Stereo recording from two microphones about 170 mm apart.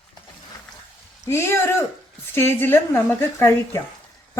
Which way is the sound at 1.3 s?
15° left (ahead or behind).